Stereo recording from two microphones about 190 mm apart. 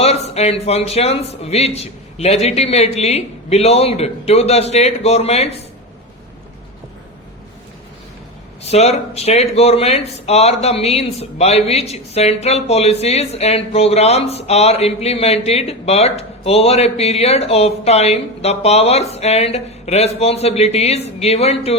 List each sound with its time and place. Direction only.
0.0 s speech: 35° left (ahead or behind)
8.6 s speech: 35° left (ahead or behind)